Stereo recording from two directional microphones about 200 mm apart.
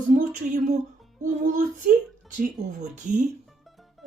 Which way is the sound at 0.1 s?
40° right (ahead or behind).